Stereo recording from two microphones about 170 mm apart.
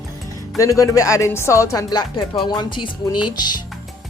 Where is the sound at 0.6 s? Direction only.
20° left (ahead or behind).